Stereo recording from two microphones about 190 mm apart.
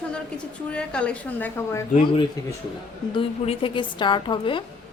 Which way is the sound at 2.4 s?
20° left (ahead or behind).